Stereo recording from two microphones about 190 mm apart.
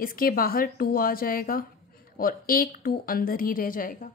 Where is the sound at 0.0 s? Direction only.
50° left (ahead or behind).